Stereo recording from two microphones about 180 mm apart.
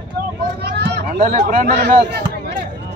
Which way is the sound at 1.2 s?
45° right (ahead or behind).